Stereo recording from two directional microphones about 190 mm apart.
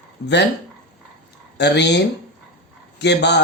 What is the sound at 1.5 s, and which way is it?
Speech, 65° left (ahead or behind).